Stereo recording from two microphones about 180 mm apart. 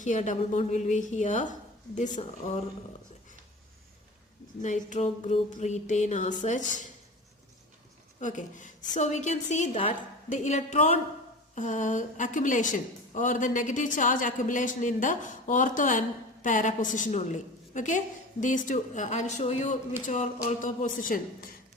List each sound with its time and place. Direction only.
0.0 s a woman's voice: 45° left (ahead or behind)
4.6 s a woman's voice: 40° left (ahead or behind)
8.2 s a woman's voice: 45° left (ahead or behind)